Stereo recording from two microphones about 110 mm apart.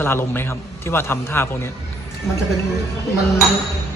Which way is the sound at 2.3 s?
5° left (ahead or behind).